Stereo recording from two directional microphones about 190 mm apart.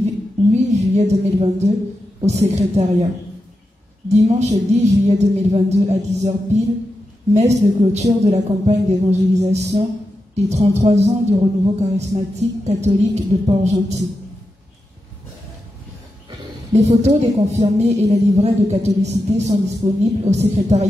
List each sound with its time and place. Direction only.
0.0 s a sound: 35° right (ahead or behind)
2.2 s speech: 35° right (ahead or behind)
4.1 s speech: 35° right (ahead or behind)
16.3 s speech: 35° right (ahead or behind)